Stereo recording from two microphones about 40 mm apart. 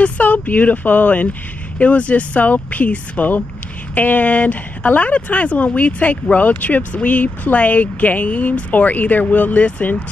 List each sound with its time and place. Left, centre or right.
0.0 s speech: left